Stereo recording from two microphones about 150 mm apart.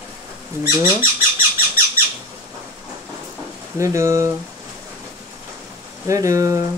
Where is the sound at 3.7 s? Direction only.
20° right (ahead or behind).